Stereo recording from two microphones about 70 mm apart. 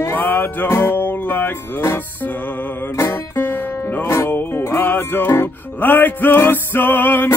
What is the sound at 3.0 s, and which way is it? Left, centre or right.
Music, left.